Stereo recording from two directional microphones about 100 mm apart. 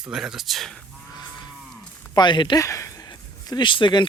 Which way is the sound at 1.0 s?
45° left (ahead or behind).